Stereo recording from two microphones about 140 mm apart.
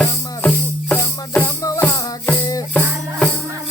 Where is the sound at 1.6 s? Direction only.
25° left (ahead or behind).